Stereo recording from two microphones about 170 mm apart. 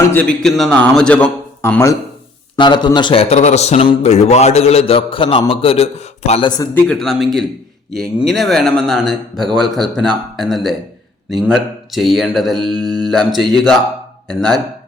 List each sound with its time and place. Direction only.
0.1 s a man's voice: 10° left (ahead or behind)
2.6 s a man's voice: 25° left (ahead or behind)
6.7 s speech: 5° left (ahead or behind)
8.3 s speech: centre (ahead or behind)